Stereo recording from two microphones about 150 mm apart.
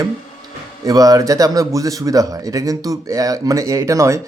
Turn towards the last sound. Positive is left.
turn(degrees=-20)  # may be behind; listen again after turning